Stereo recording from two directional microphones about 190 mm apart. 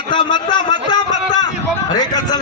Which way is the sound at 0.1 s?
25° left (ahead or behind).